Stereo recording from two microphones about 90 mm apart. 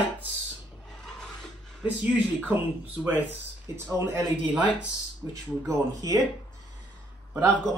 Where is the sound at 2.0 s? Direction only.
15° right (ahead or behind).